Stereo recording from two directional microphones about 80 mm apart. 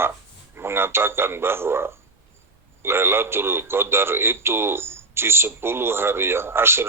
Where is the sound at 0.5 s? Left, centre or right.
Right.